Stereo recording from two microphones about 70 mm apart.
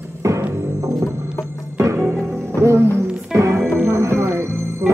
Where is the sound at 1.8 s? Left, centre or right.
Right.